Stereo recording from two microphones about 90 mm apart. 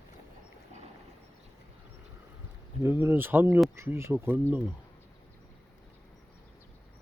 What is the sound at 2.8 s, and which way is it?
Speech, 25° right (ahead or behind).